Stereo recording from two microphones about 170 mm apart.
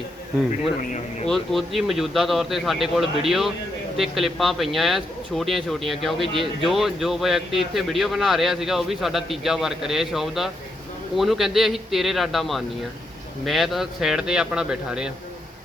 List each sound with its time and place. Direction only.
1.3 s a man's voice: centre (ahead or behind)